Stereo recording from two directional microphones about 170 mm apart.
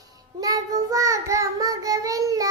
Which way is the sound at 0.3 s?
20° right (ahead or behind).